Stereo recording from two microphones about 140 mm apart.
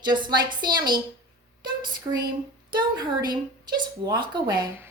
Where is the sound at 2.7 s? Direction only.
30° right (ahead or behind).